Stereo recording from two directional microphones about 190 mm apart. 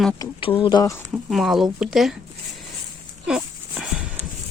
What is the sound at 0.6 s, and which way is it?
Speech, 20° left (ahead or behind).